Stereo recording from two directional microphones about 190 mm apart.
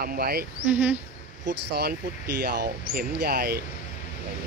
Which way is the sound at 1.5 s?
60° right (ahead or behind).